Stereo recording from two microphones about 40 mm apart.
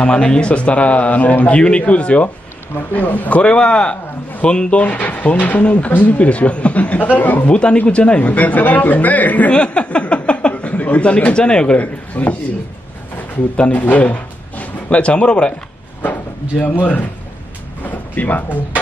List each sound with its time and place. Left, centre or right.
0.0 s speech: left
2.9 s speech: left
3.4 s speech: left
4.9 s speech: left
7.4 s speech: left
9.5 s speech: left
11.3 s speech: left
11.8 s speech: left
13.7 s speech: left
16.0 s a sound: left
16.8 s speech: left